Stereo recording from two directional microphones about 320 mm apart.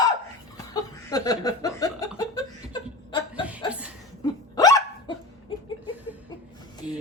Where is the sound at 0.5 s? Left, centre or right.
Centre.